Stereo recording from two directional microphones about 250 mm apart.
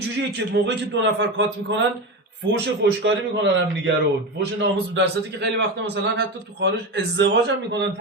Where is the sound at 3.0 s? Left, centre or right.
Right.